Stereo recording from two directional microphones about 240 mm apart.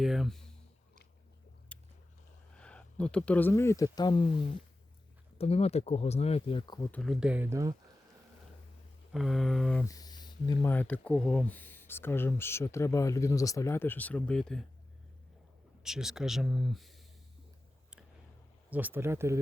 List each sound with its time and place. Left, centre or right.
0.0 s a sound: centre
1.7 s a sound: centre
2.6 s speech: centre
5.4 s speech: left
7.0 s speech: centre
9.1 s speech: centre
15.8 s speech: centre
18.7 s speech: centre